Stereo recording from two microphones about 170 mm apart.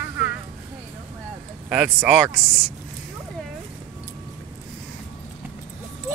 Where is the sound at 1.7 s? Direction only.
10° right (ahead or behind).